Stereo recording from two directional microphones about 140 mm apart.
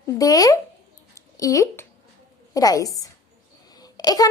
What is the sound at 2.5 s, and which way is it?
Speech, 25° left (ahead or behind).